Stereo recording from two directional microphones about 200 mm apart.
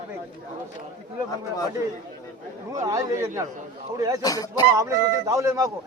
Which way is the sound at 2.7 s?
15° right (ahead or behind).